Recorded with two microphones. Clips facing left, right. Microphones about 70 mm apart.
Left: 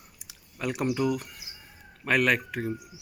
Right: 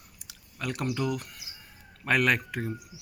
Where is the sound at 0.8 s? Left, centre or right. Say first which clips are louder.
Left 4 dB; centre.